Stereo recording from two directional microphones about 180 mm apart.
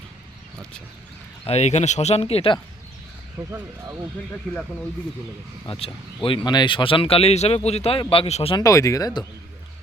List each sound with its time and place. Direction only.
1.5 s speech: 40° left (ahead or behind)
3.4 s speech: 10° right (ahead or behind)
5.6 s speech: 30° left (ahead or behind)
8.5 s speech: 15° left (ahead or behind)